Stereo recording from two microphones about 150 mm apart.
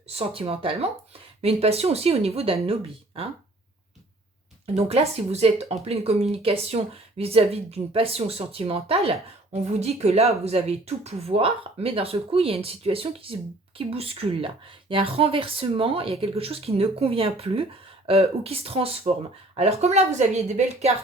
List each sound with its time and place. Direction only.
0.1 s speech: 40° right (ahead or behind)
4.6 s speech: 45° right (ahead or behind)